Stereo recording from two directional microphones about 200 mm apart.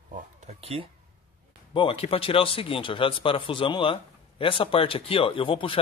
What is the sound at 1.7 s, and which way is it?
Speech, 25° left (ahead or behind).